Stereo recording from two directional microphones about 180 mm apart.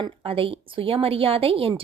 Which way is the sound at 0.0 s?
30° right (ahead or behind).